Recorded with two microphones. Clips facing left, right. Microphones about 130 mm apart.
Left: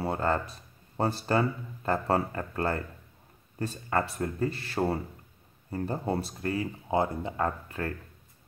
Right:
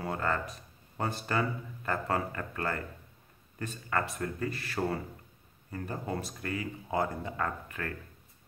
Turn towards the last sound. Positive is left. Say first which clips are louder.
# left 4 dB
turn(degrees=30)  # may be behind; listen again after turning